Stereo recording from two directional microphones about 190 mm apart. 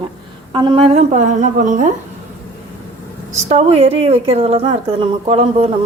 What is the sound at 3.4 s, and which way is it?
Speech, 30° right (ahead or behind).